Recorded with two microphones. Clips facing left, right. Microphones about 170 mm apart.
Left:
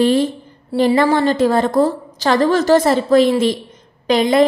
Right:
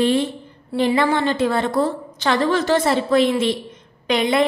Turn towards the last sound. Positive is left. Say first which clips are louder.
# left 5 dB
turn(degrees=40)  # may be behind; listen again after turning